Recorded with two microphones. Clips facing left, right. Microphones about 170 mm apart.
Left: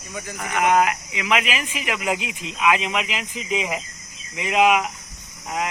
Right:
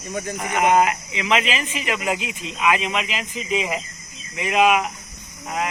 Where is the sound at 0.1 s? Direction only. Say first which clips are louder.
Right 6 dB; 35° right (ahead or behind).